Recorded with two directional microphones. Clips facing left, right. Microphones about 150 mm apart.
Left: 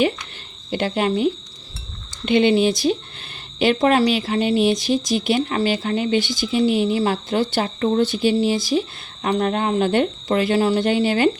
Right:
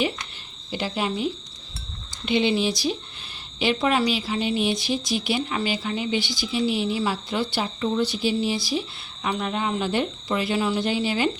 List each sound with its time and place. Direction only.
0.7 s speech: 55° left (ahead or behind)